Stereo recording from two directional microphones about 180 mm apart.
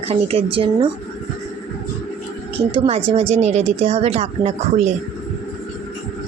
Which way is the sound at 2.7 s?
30° right (ahead or behind).